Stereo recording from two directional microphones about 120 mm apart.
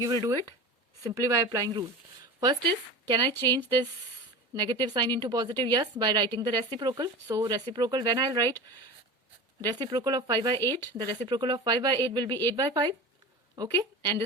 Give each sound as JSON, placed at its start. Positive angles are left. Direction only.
{"t": 0.0, "sound": "a woman's voice", "side_deg": -30}
{"t": 3.1, "sound": "a woman's voice", "side_deg": -40}
{"t": 4.5, "sound": "a woman's voice", "side_deg": -35}
{"t": 9.6, "sound": "a woman's voice", "side_deg": -35}